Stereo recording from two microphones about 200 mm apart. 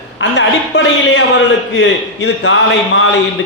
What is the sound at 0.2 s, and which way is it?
A man's voice, 65° left (ahead or behind).